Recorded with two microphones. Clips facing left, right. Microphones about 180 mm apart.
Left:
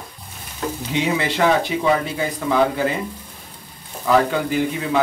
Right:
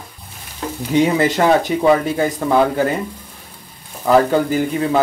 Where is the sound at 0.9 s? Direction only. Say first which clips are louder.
Right 8 dB; 45° right (ahead or behind).